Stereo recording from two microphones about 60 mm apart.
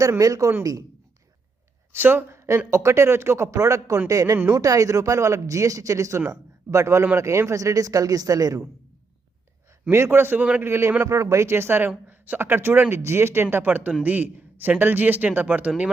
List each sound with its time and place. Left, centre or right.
0.2 s speech: right
1.9 s speech: right
2.3 s a sound: right
2.6 s speech: right
9.9 s a man's voice: right
11.0 s speech: right
11.9 s a man's voice: right